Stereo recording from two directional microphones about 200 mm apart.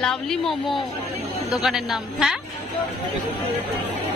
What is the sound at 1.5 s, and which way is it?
Speech, centre (ahead or behind).